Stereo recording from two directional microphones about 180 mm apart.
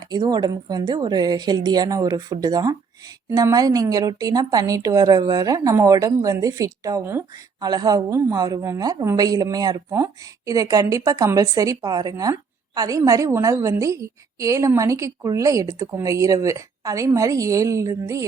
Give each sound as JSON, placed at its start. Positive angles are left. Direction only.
{"t": 0.1, "sound": "a woman's voice", "side_deg": -25}